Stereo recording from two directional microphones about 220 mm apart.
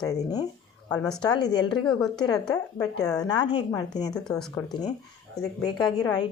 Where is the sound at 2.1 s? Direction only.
20° left (ahead or behind).